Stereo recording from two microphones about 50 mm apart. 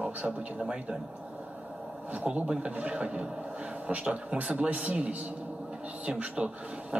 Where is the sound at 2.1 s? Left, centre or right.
Right.